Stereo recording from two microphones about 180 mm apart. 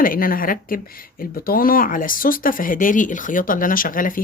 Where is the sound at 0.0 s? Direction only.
50° left (ahead or behind).